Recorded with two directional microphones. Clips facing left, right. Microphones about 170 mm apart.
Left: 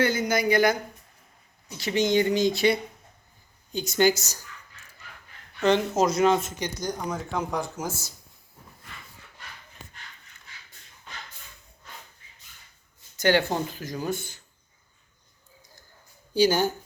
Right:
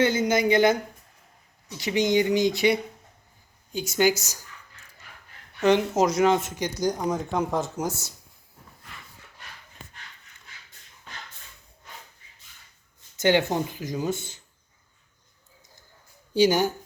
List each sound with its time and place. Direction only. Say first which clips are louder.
0.0 s speech: right 2 dB; 20° right (ahead or behind)
5.5 s speech: right 1 dB; 15° right (ahead or behind)
13.1 s speech: right 1 dB; 20° right (ahead or behind)
16.3 s speech: right 1 dB; 20° right (ahead or behind)